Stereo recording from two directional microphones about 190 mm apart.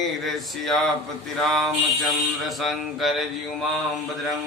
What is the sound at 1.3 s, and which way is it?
Speech, centre (ahead or behind).